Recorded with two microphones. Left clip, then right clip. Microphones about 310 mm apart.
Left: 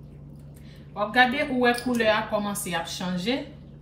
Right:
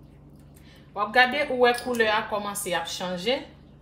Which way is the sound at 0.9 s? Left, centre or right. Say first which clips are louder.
Even; right.